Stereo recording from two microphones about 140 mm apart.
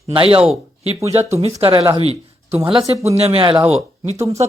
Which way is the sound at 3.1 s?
45° right (ahead or behind).